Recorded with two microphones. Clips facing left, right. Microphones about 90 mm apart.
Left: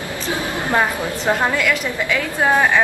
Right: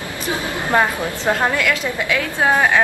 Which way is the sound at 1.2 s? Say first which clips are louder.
Even; 10° left (ahead or behind).